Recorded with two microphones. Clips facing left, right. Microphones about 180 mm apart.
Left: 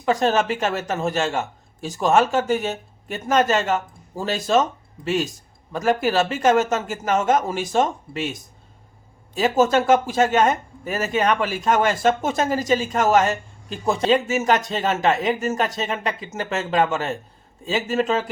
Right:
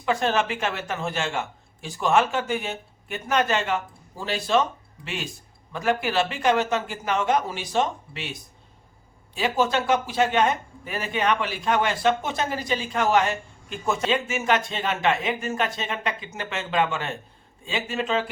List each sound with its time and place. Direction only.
0.0 s speech: 40° left (ahead or behind)